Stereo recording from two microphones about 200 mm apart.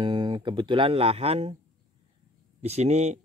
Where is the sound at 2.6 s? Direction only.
35° right (ahead or behind).